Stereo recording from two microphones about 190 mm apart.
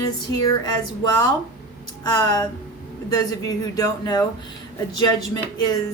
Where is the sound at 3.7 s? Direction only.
20° left (ahead or behind).